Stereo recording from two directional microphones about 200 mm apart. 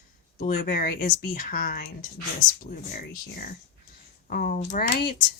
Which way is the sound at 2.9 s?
45° left (ahead or behind).